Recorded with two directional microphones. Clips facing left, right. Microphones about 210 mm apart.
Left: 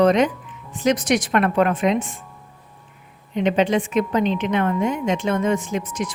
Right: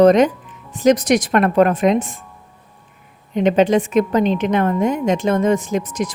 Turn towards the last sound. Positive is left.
turn(degrees=-40)  # may be behind; listen again after turning